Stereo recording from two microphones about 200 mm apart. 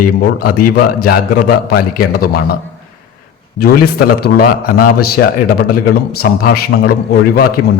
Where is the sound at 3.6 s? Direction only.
50° left (ahead or behind).